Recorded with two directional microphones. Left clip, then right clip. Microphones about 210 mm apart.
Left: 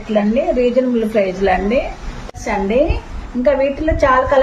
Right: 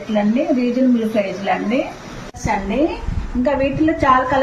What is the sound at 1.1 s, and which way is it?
Speech, 55° left (ahead or behind).